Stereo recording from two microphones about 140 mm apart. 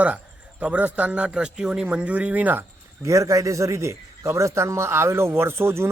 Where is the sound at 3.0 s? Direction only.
20° right (ahead or behind).